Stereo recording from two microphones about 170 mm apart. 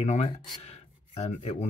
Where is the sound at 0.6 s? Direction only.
40° left (ahead or behind).